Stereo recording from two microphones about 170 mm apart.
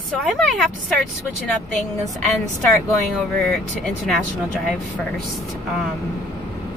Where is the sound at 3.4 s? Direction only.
Centre (ahead or behind).